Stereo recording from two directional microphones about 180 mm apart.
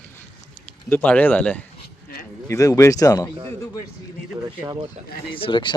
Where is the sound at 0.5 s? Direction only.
10° left (ahead or behind).